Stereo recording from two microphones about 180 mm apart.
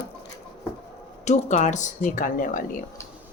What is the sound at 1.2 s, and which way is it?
Speech, 40° left (ahead or behind).